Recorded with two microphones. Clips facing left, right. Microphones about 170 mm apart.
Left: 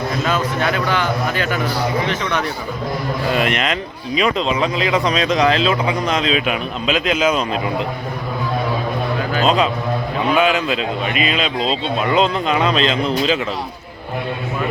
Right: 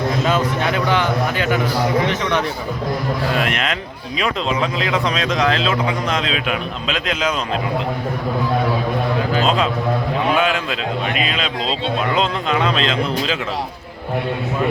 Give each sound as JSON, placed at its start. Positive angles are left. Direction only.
{"t": 0.3, "sound": "a man's voice", "side_deg": -20}
{"t": 3.3, "sound": "speech", "side_deg": 0}
{"t": 9.4, "sound": "a man's voice", "side_deg": 0}